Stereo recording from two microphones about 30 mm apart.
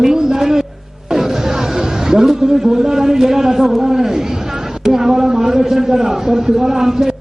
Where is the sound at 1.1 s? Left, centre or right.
Centre.